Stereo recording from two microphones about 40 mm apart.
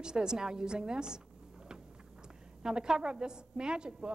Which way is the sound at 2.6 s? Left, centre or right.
Centre.